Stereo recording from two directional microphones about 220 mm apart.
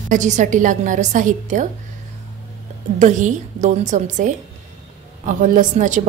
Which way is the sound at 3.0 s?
35° right (ahead or behind).